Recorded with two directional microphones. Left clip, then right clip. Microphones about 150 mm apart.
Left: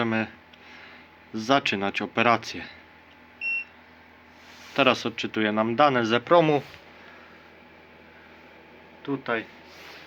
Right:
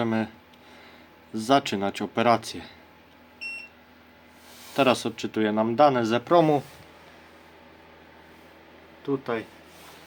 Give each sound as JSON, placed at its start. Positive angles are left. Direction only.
{"t": 0.0, "sound": "speech", "side_deg": -10}
{"t": 1.3, "sound": "speech", "side_deg": -10}
{"t": 4.7, "sound": "speech", "side_deg": -10}
{"t": 9.0, "sound": "speech", "side_deg": -20}